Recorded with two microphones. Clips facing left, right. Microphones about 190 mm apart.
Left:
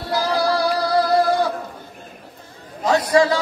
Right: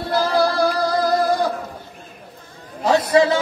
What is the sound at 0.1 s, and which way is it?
Synthetic singing, 50° right (ahead or behind).